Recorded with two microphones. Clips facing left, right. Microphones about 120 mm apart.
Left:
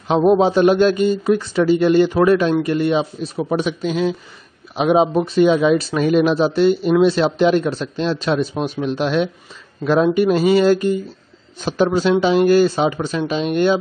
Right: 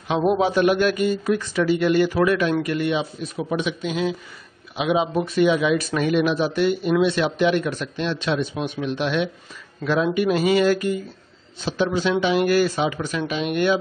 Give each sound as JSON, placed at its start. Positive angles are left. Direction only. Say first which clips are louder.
{"t": 0.2, "sound": "speech", "louder": "left 5 dB", "side_deg": 25}
{"t": 5.2, "sound": "speech", "louder": "left 5 dB", "side_deg": 30}
{"t": 11.6, "sound": "speech", "louder": "left 5 dB", "side_deg": 45}